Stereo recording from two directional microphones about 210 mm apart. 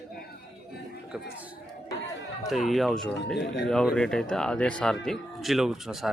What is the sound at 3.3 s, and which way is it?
Speech, 55° left (ahead or behind).